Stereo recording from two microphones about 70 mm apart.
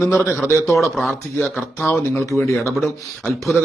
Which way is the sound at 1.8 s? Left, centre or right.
Left.